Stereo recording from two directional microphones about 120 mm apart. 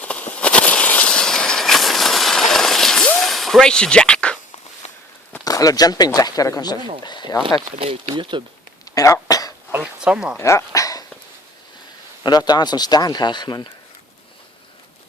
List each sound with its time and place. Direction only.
0.0 s a sound: 10° left (ahead or behind)
4.8 s walk: 65° left (ahead or behind)
5.5 s a man's voice: 30° left (ahead or behind)
7.8 s speech: 50° right (ahead or behind)
8.2 s speech: 40° right (ahead or behind)
8.8 s throat clearing: 25° left (ahead or behind)
9.7 s speech: 10° right (ahead or behind)
10.3 s speech: 25° left (ahead or behind)
12.2 s a man's voice: 35° left (ahead or behind)